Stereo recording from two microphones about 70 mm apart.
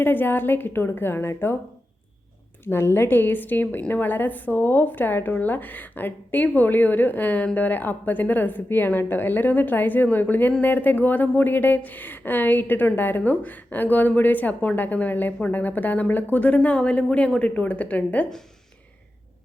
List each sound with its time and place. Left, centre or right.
0.0 s a woman's voice: left
2.6 s a woman's voice: left